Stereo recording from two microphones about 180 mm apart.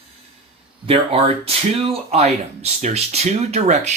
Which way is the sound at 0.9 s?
35° right (ahead or behind).